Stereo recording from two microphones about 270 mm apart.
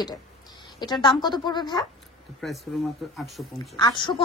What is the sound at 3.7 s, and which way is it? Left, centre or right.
Speech, centre.